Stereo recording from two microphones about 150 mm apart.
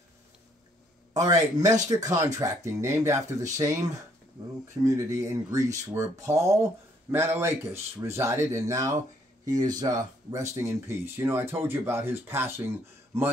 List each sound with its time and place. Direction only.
1.1 s speech: 20° right (ahead or behind)